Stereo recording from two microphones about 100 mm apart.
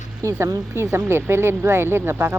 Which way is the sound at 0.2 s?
30° right (ahead or behind).